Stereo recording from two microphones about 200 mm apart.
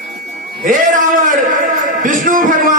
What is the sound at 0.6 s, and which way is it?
A man's voice, 40° right (ahead or behind).